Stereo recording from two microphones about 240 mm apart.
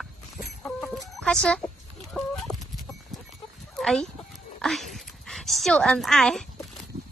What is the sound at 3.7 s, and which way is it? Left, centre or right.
Sheep, centre.